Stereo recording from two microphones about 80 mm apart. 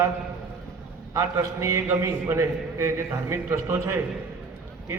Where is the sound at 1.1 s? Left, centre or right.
Right.